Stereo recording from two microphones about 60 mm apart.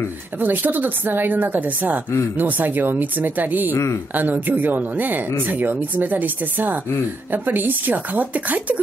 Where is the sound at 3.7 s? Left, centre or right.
Left.